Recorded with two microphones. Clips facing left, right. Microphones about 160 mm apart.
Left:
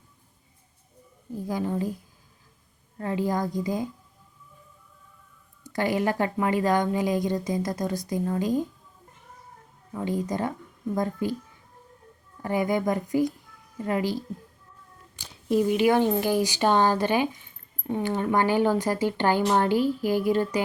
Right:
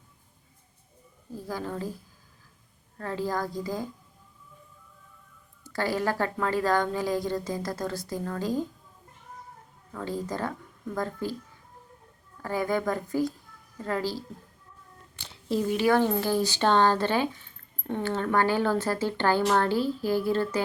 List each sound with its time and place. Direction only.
1.3 s a woman's voice: 20° left (ahead or behind)
3.0 s a woman's voice: 15° left (ahead or behind)
5.6 s a woman's voice: 20° left (ahead or behind)
9.9 s a woman's voice: 15° left (ahead or behind)
12.4 s a woman's voice: 20° left (ahead or behind)
15.4 s a woman's voice: 15° left (ahead or behind)